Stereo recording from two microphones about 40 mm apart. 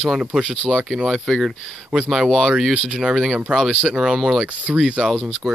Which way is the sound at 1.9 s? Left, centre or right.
Right.